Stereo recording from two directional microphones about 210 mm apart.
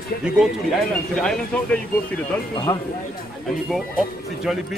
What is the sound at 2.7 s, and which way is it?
Speech, 20° left (ahead or behind).